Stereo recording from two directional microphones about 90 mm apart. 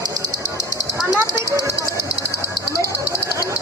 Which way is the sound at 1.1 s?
40° right (ahead or behind).